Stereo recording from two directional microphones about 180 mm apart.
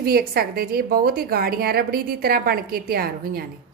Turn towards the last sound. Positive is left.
turn(degrees=-55)  # may be behind; listen again after turning